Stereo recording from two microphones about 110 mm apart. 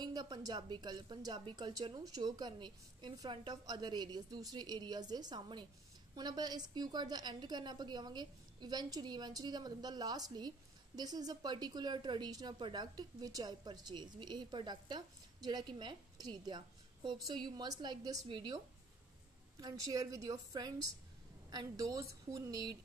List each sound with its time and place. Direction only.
0.0 s a woman's voice: 40° right (ahead or behind)
19.6 s a woman's voice: 30° right (ahead or behind)